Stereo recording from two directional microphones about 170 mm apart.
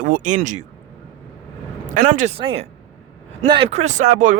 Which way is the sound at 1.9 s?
50° right (ahead or behind).